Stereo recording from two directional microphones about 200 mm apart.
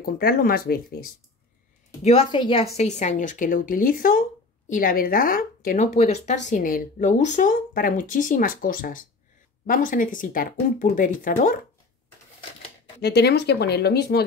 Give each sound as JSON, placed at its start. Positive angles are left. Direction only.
{"t": 0.0, "sound": "speech", "side_deg": 50}
{"t": 2.0, "sound": "a woman's voice", "side_deg": 25}
{"t": 3.0, "sound": "speech", "side_deg": 40}
{"t": 13.0, "sound": "speech", "side_deg": 55}